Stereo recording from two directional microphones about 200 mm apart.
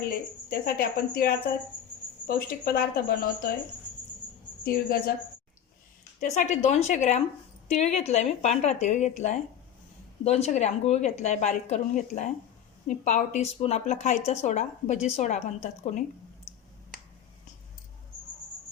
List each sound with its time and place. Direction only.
0.1 s speech: 50° left (ahead or behind)
4.6 s speech: 50° left (ahead or behind)
6.2 s a woman's voice: 35° left (ahead or behind)